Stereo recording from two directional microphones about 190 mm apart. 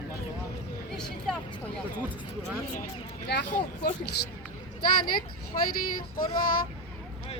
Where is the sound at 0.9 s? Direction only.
5° left (ahead or behind).